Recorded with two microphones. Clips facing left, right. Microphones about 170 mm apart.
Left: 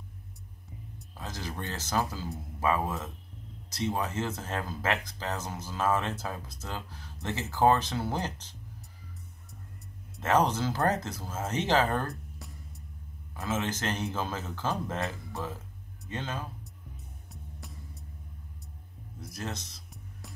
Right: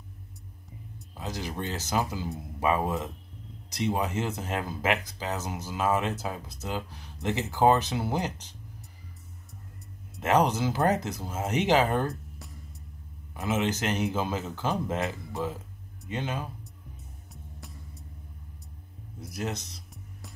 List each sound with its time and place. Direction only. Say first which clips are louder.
1.1 s speech: right 4 dB; 15° right (ahead or behind)
10.2 s speech: right 2 dB; 15° right (ahead or behind)
12.1 s music: right 2 dB; centre (ahead or behind)
13.3 s speech: right 4 dB; 15° right (ahead or behind)
17.3 s music: even; centre (ahead or behind)
19.3 s speech: right 5 dB; 15° right (ahead or behind)
19.9 s music: even; centre (ahead or behind)